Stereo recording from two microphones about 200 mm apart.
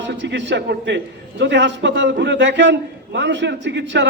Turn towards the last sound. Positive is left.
turn(degrees=-60)  # may be behind; listen again after turning